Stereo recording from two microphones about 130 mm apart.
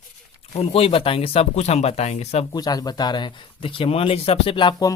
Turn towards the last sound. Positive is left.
turn(degrees=30)  # may be behind; listen again after turning